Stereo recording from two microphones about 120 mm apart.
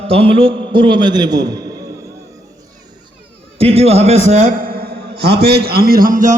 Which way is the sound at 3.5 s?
55° right (ahead or behind).